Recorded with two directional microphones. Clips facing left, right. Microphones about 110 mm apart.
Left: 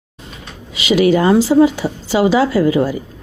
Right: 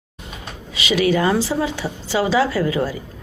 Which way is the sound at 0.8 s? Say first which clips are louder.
Left 5 dB; 25° left (ahead or behind).